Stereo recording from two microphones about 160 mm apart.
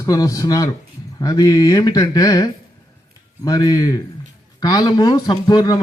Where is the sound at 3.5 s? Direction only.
25° left (ahead or behind).